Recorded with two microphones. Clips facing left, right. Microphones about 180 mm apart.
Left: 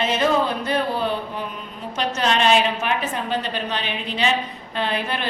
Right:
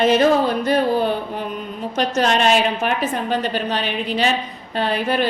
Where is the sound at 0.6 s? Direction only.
45° right (ahead or behind).